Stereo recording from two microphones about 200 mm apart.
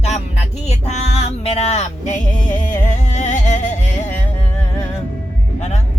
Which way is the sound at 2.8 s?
35° left (ahead or behind).